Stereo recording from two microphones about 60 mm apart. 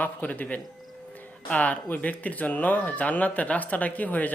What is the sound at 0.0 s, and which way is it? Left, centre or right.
Speech, left.